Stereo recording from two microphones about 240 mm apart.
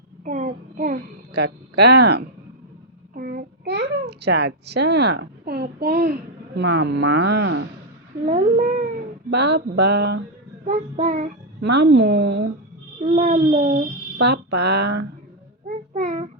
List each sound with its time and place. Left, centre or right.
0.3 s a child's voice: right
7.4 s speech: right
8.2 s speech: right
9.3 s speech: right
10.7 s speech: right
11.6 s speech: right
13.0 s speech: right
14.2 s speech: right
16.0 s child singing: right